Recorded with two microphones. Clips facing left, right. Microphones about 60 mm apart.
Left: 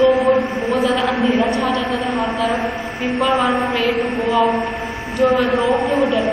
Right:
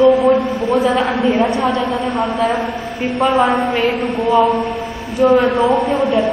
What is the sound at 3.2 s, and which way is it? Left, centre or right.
Speech, right.